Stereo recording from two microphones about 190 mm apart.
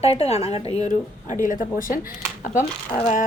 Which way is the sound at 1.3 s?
45° left (ahead or behind).